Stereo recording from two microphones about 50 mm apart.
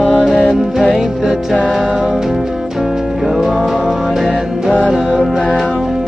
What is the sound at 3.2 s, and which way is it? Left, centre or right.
Music, centre.